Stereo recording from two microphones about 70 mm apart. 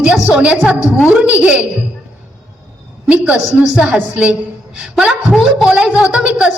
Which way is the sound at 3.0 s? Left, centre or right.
Centre.